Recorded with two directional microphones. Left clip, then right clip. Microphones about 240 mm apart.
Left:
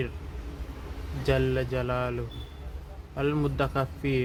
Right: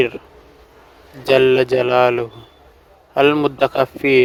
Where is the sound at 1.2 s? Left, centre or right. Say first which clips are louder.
Right 14 dB; right.